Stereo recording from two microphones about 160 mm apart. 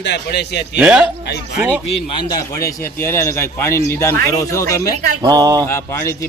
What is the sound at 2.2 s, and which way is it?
A man's voice, 20° left (ahead or behind).